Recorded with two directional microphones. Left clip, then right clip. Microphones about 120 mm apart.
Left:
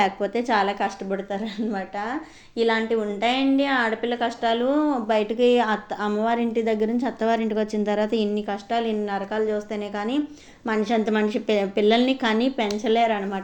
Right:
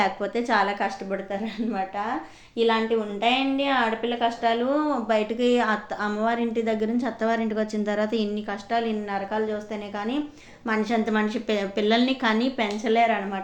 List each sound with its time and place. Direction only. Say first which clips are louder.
0.0 s a woman's voice: left 2 dB; 40° left (ahead or behind)
10.7 s a woman's voice: left 2 dB; 45° left (ahead or behind)